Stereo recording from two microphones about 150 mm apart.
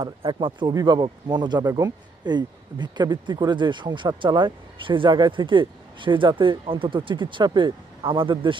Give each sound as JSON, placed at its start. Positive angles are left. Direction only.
{"t": 0.0, "sound": "speech", "side_deg": -30}